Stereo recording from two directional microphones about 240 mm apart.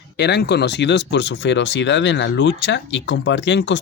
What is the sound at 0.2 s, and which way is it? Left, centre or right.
Speech, left.